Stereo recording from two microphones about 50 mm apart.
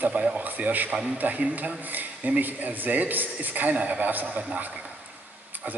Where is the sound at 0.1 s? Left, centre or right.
Right.